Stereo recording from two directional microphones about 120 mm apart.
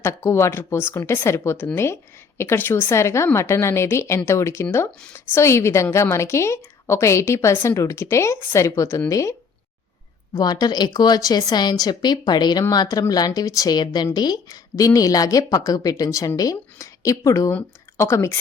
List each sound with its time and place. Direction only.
0.0 s speech: 25° left (ahead or behind)
10.3 s speech: 35° left (ahead or behind)